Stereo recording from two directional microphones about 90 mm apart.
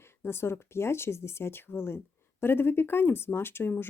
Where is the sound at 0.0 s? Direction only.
30° left (ahead or behind).